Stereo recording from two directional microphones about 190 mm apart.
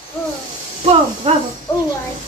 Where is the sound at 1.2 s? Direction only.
30° right (ahead or behind).